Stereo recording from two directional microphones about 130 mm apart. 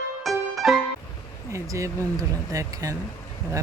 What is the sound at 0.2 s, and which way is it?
Music, centre (ahead or behind).